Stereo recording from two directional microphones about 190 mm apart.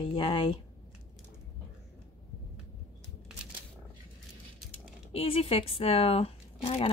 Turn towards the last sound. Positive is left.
turn(degrees=30)  # may be behind; listen again after turning